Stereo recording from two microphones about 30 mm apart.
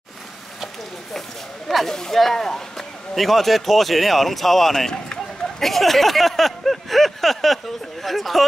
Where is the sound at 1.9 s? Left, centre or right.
Centre.